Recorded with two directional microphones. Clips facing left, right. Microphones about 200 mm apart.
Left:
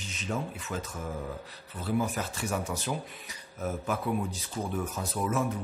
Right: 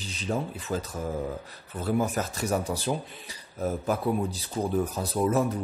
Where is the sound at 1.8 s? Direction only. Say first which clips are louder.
Right 3 dB; 45° right (ahead or behind).